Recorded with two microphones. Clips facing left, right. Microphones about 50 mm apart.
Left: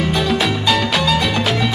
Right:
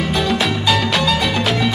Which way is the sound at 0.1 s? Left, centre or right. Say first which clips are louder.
Even; centre.